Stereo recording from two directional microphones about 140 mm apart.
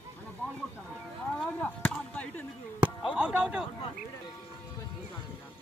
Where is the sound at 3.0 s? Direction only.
5° right (ahead or behind).